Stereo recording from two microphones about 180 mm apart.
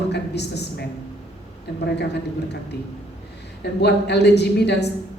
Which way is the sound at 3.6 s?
70° left (ahead or behind).